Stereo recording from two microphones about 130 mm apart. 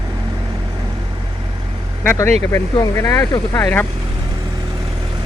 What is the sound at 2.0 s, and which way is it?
Speech, 15° left (ahead or behind).